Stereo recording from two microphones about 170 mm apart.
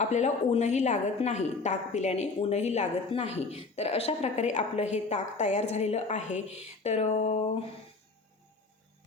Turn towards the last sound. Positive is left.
turn(degrees=40)  # may be behind; listen again after turning